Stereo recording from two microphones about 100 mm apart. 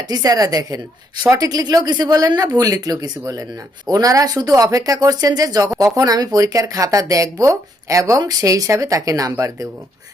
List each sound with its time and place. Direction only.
0.1 s speech: 40° right (ahead or behind)